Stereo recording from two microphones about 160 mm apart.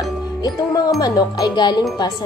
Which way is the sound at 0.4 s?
20° left (ahead or behind).